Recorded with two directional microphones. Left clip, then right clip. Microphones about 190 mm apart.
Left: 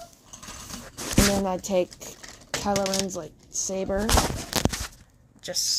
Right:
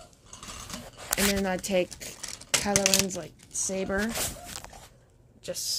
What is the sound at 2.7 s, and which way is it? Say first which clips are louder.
Speech: right 3 dB; 30° right (ahead or behind).